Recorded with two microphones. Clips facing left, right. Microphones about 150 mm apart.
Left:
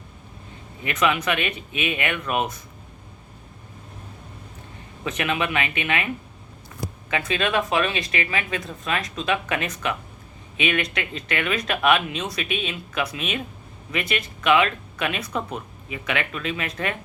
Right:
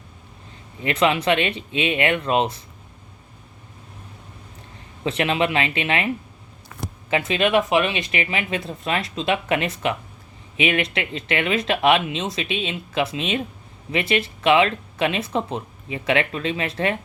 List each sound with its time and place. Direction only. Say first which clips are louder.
0.9 s speech: right 4 dB; 25° right (ahead or behind)
5.0 s speech: right 4 dB; 30° right (ahead or behind)
7.1 s speech: right 5 dB; 25° right (ahead or behind)